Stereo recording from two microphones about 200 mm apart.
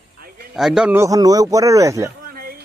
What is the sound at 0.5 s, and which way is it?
Speech, centre (ahead or behind).